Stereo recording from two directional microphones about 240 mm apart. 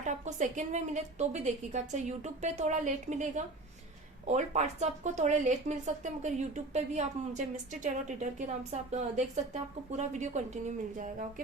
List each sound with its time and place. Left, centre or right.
0.0 s speech: right